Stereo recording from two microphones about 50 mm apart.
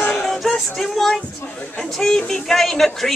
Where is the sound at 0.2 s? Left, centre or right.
Centre.